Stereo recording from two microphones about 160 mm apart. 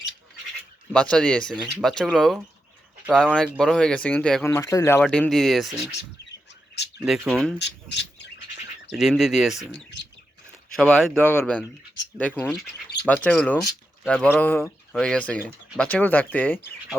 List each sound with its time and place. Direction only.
0.9 s speech: 5° left (ahead or behind)
4.4 s speech: 20° left (ahead or behind)
4.9 s speech: 5° left (ahead or behind)
7.0 s speech: centre (ahead or behind)
7.6 s squawk: 90° left
8.9 s speech: centre (ahead or behind)
10.8 s speech: 5° left (ahead or behind)